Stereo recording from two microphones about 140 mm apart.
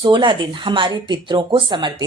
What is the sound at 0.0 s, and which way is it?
A woman's voice, 35° right (ahead or behind).